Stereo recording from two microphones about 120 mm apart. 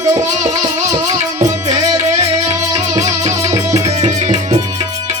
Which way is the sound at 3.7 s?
70° right (ahead or behind).